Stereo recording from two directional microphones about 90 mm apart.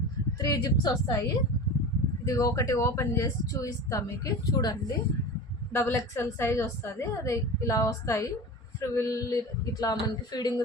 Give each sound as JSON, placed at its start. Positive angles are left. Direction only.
{"t": 0.3, "sound": "speech", "side_deg": 40}
{"t": 2.2, "sound": "speech", "side_deg": 40}
{"t": 5.7, "sound": "speech", "side_deg": 30}